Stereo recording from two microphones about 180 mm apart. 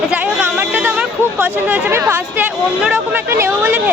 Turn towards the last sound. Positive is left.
turn(degrees=-10)  # may be behind; listen again after turning